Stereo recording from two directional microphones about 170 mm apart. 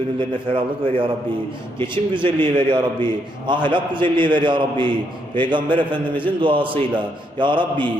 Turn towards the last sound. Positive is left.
turn(degrees=-30)  # may be behind; listen again after turning